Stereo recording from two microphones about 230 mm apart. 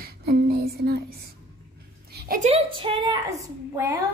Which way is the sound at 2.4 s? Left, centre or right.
Right.